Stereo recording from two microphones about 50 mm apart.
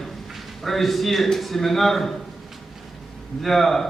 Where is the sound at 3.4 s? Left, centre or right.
Centre.